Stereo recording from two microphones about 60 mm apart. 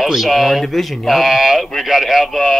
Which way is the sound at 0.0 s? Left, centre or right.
Centre.